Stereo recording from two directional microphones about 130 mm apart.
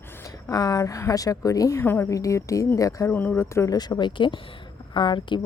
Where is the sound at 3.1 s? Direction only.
15° left (ahead or behind).